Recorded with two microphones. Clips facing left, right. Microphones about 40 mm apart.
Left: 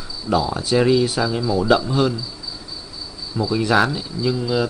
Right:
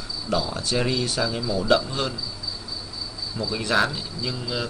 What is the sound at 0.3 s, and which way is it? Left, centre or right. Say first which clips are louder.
Speech: left 6 dB; centre.